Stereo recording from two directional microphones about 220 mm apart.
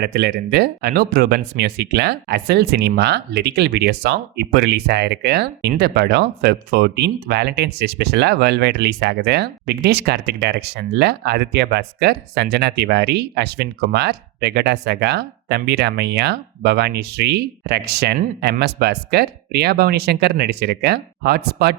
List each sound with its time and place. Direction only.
0.0 s speech: 50° right (ahead or behind)